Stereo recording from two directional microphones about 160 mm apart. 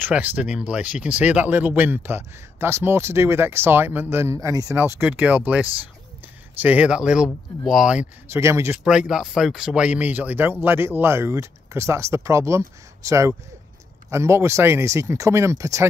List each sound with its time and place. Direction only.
0.0 s speech: 10° right (ahead or behind)